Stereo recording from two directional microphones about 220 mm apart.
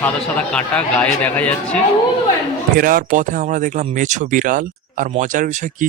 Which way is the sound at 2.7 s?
40° right (ahead or behind).